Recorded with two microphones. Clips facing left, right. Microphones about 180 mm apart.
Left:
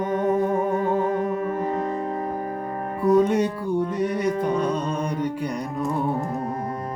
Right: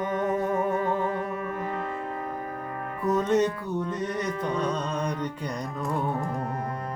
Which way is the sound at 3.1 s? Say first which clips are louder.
Left 4 dB; 10° left (ahead or behind).